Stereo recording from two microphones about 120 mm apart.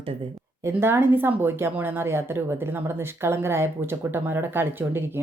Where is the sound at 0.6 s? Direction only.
20° right (ahead or behind).